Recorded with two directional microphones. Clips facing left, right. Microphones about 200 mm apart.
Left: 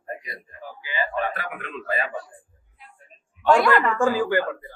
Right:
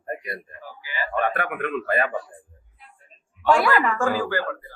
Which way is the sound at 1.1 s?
60° right (ahead or behind).